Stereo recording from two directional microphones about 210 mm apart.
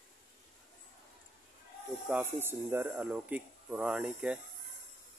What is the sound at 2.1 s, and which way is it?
Speech, 10° right (ahead or behind).